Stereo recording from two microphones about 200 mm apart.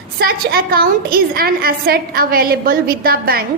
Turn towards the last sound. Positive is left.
turn(degrees=-45)  # may be behind; listen again after turning